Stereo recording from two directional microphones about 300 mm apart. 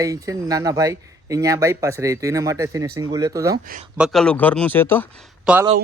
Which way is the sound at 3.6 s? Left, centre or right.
Right.